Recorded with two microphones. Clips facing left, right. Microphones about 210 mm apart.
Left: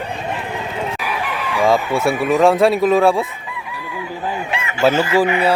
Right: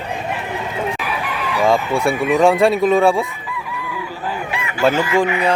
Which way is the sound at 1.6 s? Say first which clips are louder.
Even; centre (ahead or behind).